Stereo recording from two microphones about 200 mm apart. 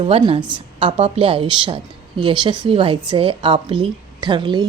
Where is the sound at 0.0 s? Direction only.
30° right (ahead or behind).